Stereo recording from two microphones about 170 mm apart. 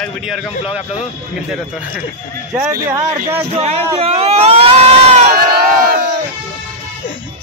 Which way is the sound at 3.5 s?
35° right (ahead or behind).